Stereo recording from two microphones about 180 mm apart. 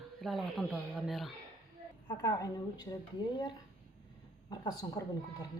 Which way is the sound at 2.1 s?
20° left (ahead or behind).